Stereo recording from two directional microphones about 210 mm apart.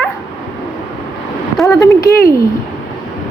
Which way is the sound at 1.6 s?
15° left (ahead or behind).